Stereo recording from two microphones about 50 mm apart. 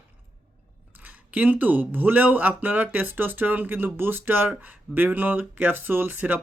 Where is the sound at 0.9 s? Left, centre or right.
Right.